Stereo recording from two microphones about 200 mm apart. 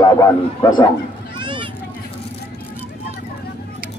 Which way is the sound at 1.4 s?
25° right (ahead or behind).